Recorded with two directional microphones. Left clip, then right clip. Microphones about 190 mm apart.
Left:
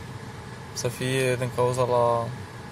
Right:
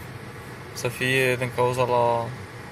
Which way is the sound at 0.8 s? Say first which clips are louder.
Right 4 dB; 5° left (ahead or behind).